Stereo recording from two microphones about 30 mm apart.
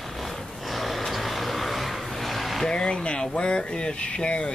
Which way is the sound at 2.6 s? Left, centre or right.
Left.